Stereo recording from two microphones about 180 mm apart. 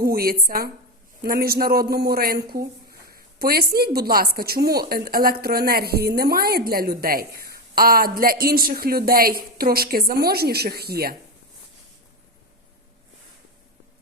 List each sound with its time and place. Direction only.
0.0 s a woman's voice: 55° right (ahead or behind)